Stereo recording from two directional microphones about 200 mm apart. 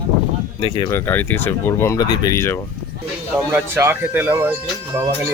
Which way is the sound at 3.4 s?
10° right (ahead or behind).